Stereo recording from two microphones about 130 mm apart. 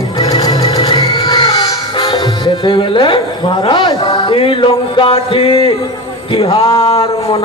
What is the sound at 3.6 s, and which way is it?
Speech, 35° left (ahead or behind).